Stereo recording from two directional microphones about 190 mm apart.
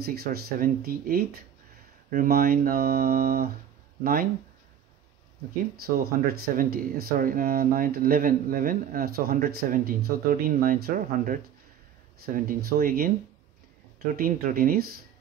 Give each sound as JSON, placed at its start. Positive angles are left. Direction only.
{"t": 0.0, "sound": "speech", "side_deg": -55}
{"t": 5.9, "sound": "speech", "side_deg": -50}